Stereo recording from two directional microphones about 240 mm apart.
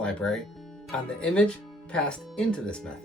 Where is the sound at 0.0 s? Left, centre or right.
Centre.